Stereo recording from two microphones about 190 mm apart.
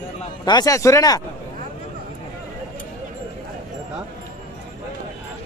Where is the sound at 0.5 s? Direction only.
20° left (ahead or behind).